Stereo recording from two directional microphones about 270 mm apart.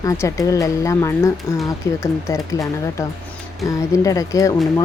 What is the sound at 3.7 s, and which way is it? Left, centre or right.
Speech, centre.